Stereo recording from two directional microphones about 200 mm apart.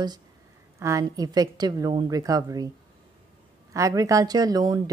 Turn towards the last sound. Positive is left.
turn(degrees=-20)  # may be behind; listen again after turning